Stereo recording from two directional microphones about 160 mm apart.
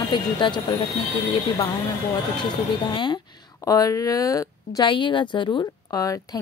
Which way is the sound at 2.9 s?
30° left (ahead or behind).